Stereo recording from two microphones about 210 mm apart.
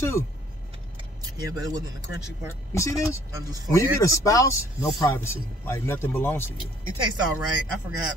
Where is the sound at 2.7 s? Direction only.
15° left (ahead or behind).